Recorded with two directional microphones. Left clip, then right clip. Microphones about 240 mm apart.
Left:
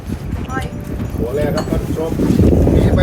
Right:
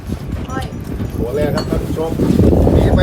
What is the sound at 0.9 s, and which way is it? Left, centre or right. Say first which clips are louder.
Speech: even; centre.